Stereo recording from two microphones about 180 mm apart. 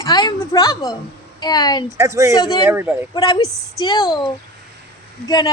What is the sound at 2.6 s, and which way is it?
Speech, 10° right (ahead or behind).